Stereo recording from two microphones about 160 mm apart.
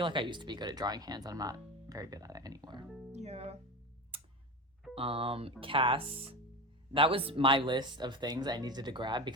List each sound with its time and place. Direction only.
0.0 s speech: 30° right (ahead or behind)
2.8 s speech: 5° right (ahead or behind)
3.1 s speech: 45° right (ahead or behind)
4.1 s tick-tock: 35° right (ahead or behind)
4.9 s speech: 35° right (ahead or behind)